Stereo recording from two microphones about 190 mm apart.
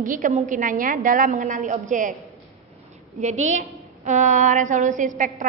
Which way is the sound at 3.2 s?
40° right (ahead or behind).